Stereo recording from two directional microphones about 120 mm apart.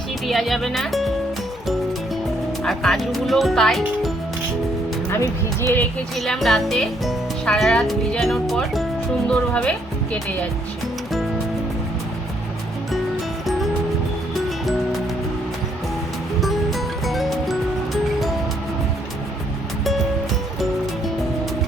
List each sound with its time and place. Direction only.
0.3 s speech: centre (ahead or behind)
2.6 s speech: centre (ahead or behind)
5.1 s speech: 20° left (ahead or behind)
6.1 s speech: centre (ahead or behind)
16.4 s music: centre (ahead or behind)